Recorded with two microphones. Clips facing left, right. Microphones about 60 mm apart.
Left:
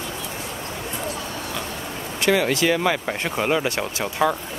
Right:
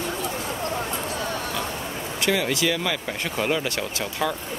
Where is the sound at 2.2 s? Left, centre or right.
Left.